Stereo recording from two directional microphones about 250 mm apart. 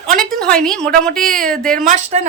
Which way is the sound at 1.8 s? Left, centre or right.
Right.